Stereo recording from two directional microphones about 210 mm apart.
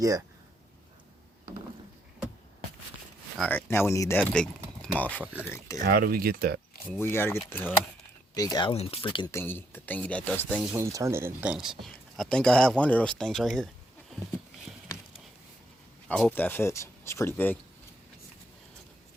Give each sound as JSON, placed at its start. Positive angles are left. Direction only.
{"t": 3.3, "sound": "speech", "side_deg": 0}
{"t": 3.7, "sound": "speech", "side_deg": 10}
{"t": 5.8, "sound": "speech", "side_deg": -45}
{"t": 6.9, "sound": "speech", "side_deg": 10}
{"t": 8.4, "sound": "speech", "side_deg": 20}
{"t": 10.6, "sound": "speech", "side_deg": -10}
{"t": 14.7, "sound": "a sound", "side_deg": 0}
{"t": 16.0, "sound": "speech", "side_deg": 5}